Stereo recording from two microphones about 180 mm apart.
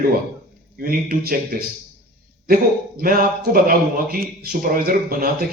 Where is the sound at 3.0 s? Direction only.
50° right (ahead or behind).